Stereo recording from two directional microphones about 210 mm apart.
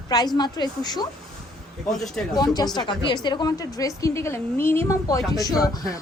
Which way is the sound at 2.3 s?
20° left (ahead or behind).